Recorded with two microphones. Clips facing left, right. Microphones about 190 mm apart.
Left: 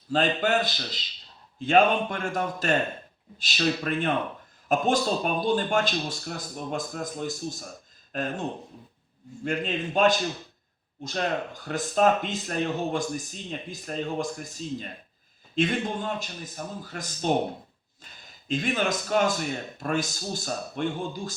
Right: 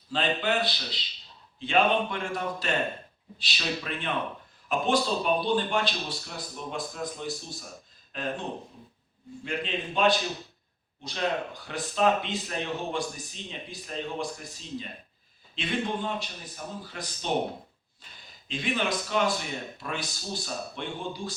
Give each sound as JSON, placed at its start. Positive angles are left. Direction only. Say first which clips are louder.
{"t": 0.1, "sound": "speech", "louder": "left 4 dB", "side_deg": 45}
{"t": 18.4, "sound": "speech", "louder": "left 3 dB", "side_deg": 45}